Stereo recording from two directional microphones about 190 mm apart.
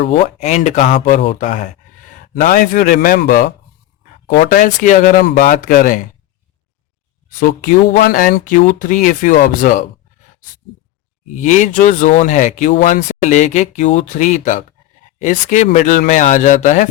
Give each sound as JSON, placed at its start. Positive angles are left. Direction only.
{"t": 0.1, "sound": "speech", "side_deg": 35}
{"t": 7.3, "sound": "speech", "side_deg": 45}
{"t": 11.3, "sound": "speech", "side_deg": 40}